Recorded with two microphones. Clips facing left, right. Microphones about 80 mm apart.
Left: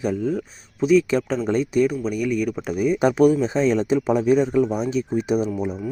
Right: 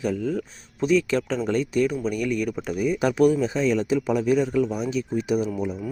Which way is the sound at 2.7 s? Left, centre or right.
Centre.